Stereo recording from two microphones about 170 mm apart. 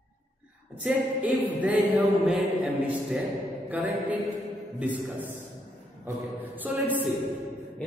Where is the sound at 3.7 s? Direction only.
10° right (ahead or behind).